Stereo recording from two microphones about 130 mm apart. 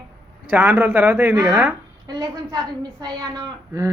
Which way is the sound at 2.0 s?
30° right (ahead or behind).